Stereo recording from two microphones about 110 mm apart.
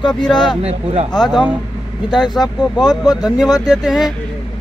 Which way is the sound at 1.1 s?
40° left (ahead or behind).